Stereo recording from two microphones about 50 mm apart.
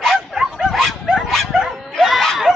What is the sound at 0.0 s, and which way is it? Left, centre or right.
Bow-wow, centre.